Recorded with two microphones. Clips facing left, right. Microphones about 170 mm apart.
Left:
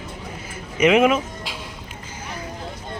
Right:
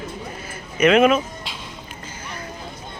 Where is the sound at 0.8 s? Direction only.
15° left (ahead or behind).